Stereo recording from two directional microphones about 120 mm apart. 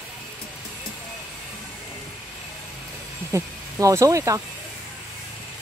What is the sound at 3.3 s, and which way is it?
Speech, 25° right (ahead or behind).